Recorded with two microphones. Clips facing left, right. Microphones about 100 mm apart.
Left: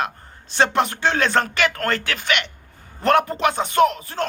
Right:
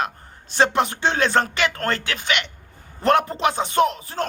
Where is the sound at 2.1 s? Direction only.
40° left (ahead or behind).